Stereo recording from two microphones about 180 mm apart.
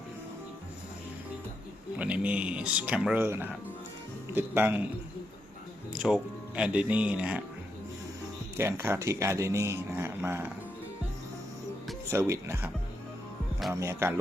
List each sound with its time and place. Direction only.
2.0 s speech: 10° right (ahead or behind)
5.9 s speech: 5° right (ahead or behind)
8.5 s speech: 15° right (ahead or behind)
12.1 s speech: 15° right (ahead or behind)
13.7 s speech: 15° right (ahead or behind)